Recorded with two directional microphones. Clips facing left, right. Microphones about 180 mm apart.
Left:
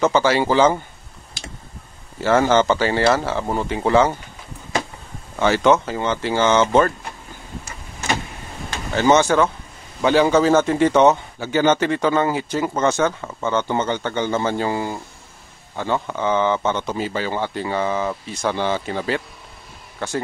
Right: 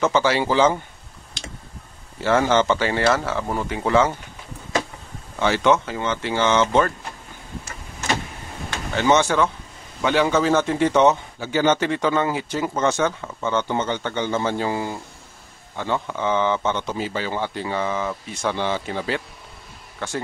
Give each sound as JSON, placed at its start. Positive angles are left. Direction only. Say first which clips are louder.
{"t": 0.0, "sound": "a man's voice", "louder": "left 2 dB", "side_deg": 45}
{"t": 2.2, "sound": "speech", "louder": "left 2 dB", "side_deg": 45}
{"t": 5.4, "sound": "a man's voice", "louder": "left 3 dB", "side_deg": 45}
{"t": 8.9, "sound": "a man's voice", "louder": "left 3 dB", "side_deg": 40}
{"t": 10.0, "sound": "a man's voice", "louder": "left 4 dB", "side_deg": 35}